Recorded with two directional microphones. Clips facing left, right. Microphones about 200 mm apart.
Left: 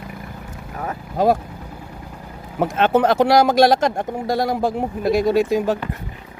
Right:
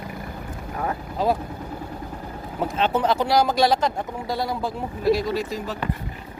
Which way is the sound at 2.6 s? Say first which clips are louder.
Left 6 dB; 55° left (ahead or behind).